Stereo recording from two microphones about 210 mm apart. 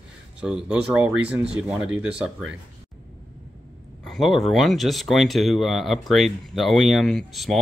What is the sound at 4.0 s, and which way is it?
Speech, centre (ahead or behind).